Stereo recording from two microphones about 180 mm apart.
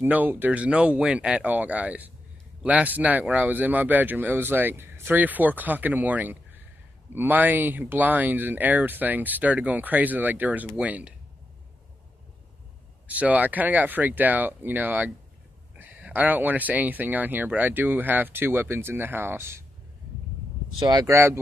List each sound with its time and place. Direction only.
0.0 s speech: 10° right (ahead or behind)
13.0 s speech: 10° right (ahead or behind)
20.8 s speech: 20° right (ahead or behind)